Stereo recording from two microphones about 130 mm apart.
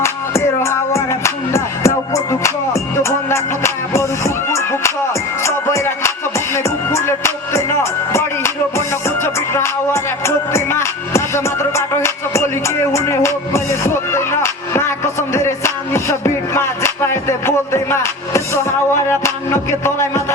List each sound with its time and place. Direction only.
0.0 s music: 20° left (ahead or behind)
3.0 s music: 20° left (ahead or behind)
19.8 s a sound: 20° left (ahead or behind)